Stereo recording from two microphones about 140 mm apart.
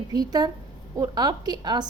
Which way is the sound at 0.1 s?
30° right (ahead or behind).